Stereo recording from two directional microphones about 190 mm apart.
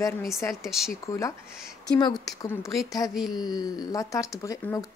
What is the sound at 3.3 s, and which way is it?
A woman's voice, 20° left (ahead or behind).